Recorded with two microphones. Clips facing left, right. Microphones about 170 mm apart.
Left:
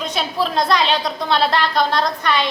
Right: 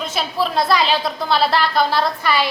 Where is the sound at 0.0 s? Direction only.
5° right (ahead or behind).